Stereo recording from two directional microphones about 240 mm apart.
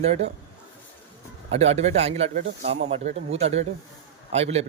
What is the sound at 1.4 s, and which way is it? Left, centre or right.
Speech, right.